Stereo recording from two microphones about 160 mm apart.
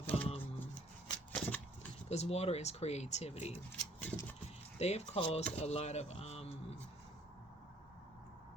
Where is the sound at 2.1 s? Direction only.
40° left (ahead or behind).